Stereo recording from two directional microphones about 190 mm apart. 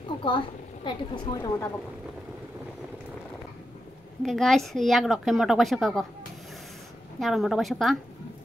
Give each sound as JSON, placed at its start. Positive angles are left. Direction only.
{"t": 0.8, "sound": "a woman's voice", "side_deg": 25}
{"t": 4.2, "sound": "speech", "side_deg": 0}
{"t": 7.2, "sound": "speech", "side_deg": 0}